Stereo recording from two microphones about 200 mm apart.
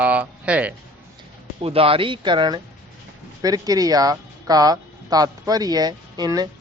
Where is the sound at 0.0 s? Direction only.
5° right (ahead or behind).